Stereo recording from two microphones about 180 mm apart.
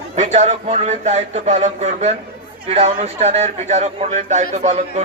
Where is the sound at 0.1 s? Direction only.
40° right (ahead or behind).